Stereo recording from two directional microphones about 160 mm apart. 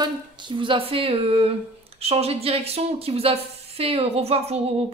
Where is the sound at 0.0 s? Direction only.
30° right (ahead or behind).